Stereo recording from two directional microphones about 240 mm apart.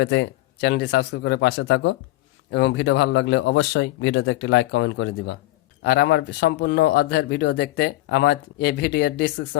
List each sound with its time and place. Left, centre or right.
0.0 s speech: left